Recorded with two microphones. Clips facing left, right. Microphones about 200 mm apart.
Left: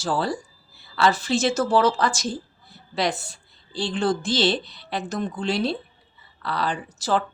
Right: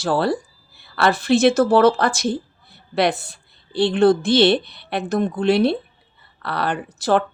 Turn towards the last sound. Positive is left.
turn(degrees=-60)  # may be behind; listen again after turning